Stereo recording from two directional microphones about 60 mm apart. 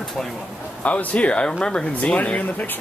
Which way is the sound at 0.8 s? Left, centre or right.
Left.